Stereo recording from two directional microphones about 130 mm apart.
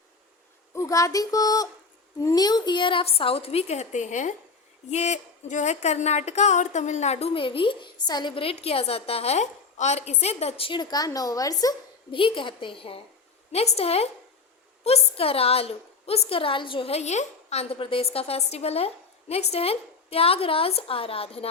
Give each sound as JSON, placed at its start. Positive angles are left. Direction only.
{"t": 0.7, "sound": "a woman's voice", "side_deg": 25}
{"t": 10.7, "sound": "a woman's voice", "side_deg": 35}
{"t": 12.1, "sound": "a woman's voice", "side_deg": 40}